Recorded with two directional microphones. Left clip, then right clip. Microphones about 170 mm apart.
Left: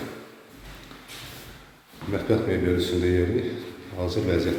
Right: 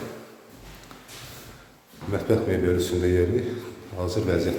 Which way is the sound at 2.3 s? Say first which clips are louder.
Right 1 dB; 10° right (ahead or behind).